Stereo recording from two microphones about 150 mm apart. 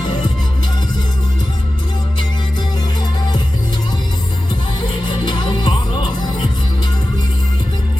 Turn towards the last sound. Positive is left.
turn(degrees=30)  # may be behind; listen again after turning